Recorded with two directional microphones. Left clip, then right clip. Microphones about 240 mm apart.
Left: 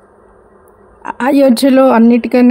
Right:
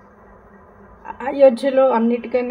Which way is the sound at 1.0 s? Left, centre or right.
Left.